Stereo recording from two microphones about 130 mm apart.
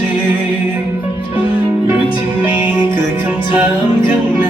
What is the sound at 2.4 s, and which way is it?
Music, 15° right (ahead or behind).